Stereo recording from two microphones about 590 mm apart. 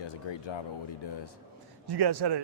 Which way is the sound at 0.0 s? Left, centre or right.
Left.